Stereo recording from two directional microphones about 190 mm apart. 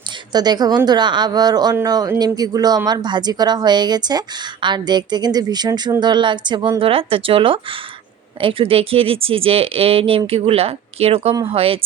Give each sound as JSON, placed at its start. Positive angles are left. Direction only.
{"t": 0.3, "sound": "speech", "side_deg": -20}